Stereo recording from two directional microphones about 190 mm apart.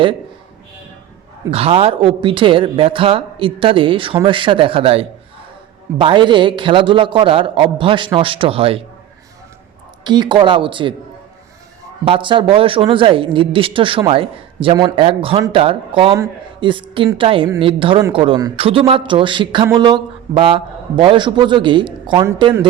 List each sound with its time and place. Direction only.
1.5 s a man's voice: 30° right (ahead or behind)
10.0 s a man's voice: 25° right (ahead or behind)
12.0 s a man's voice: 25° right (ahead or behind)